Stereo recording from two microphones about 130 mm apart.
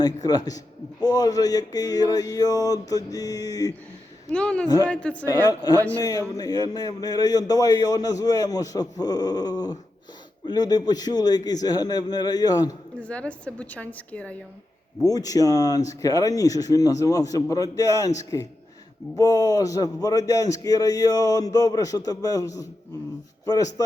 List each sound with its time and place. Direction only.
0.0 s a man's voice: 30° left (ahead or behind)
4.3 s a woman's voice: 10° left (ahead or behind)
5.3 s a man's voice: 30° left (ahead or behind)
13.0 s a woman's voice: 10° left (ahead or behind)
15.0 s a man's voice: 30° left (ahead or behind)